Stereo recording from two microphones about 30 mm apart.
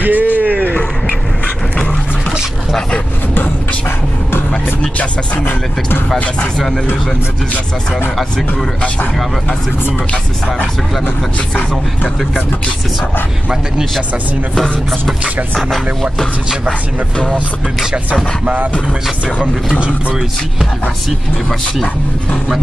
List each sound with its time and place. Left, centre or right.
0.0 s a sound: right
8.2 s speech: centre
14.5 s speech: centre